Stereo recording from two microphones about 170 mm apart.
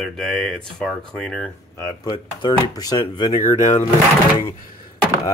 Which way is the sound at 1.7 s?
20° left (ahead or behind).